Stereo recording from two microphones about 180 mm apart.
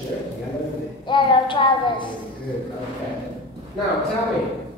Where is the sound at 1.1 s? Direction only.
25° left (ahead or behind).